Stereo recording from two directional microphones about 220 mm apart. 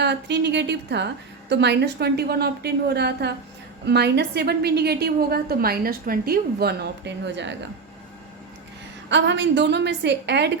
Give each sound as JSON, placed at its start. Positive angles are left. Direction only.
{"t": 0.0, "sound": "a woman's voice", "side_deg": -50}
{"t": 9.0, "sound": "a woman's voice", "side_deg": -55}